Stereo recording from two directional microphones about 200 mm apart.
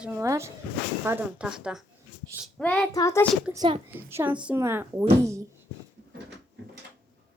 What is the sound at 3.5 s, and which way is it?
Speech, 20° right (ahead or behind).